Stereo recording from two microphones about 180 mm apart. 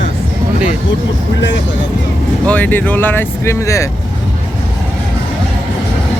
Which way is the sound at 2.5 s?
10° left (ahead or behind).